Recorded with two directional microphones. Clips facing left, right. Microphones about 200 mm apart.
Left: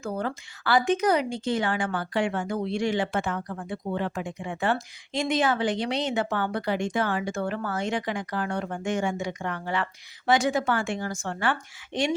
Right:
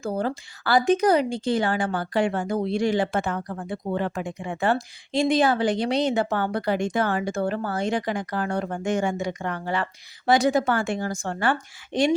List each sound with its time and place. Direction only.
0.0 s speech: 35° right (ahead or behind)